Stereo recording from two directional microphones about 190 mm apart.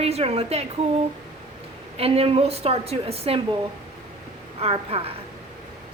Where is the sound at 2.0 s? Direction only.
30° right (ahead or behind).